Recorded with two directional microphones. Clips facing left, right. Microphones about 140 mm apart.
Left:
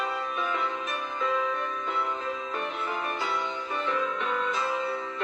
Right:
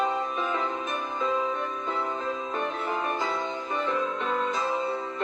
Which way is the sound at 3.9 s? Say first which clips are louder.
Even; 35° right (ahead or behind).